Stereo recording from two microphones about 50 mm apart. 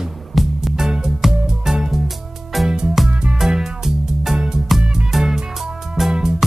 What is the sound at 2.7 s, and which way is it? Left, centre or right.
Music, centre.